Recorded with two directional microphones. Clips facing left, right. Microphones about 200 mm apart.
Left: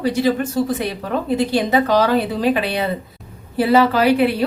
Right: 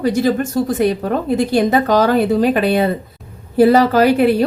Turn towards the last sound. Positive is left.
turn(degrees=-45)  # may be behind; listen again after turning